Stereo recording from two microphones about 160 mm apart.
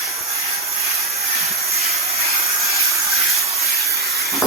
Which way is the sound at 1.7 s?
40° right (ahead or behind).